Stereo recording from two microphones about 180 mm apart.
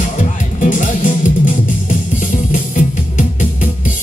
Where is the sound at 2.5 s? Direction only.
45° left (ahead or behind).